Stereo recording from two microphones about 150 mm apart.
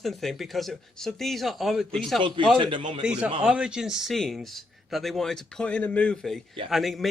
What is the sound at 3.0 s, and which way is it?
A man's voice, 5° right (ahead or behind).